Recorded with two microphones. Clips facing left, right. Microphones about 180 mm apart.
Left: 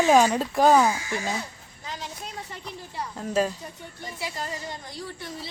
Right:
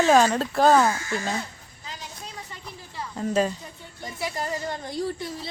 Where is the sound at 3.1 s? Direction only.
5° left (ahead or behind).